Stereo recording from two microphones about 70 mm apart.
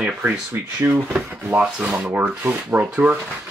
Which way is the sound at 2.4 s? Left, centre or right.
Right.